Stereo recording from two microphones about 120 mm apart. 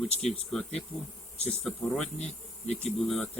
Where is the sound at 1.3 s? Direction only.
60° left (ahead or behind).